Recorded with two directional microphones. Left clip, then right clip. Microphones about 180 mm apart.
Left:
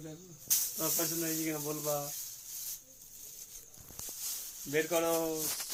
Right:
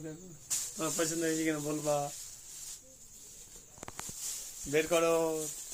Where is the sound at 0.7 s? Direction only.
65° right (ahead or behind).